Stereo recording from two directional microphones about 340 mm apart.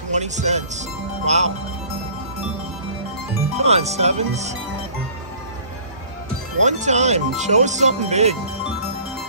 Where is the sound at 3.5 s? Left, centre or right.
Centre.